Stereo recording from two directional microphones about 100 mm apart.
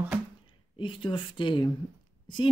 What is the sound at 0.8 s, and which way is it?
Speech, 55° left (ahead or behind).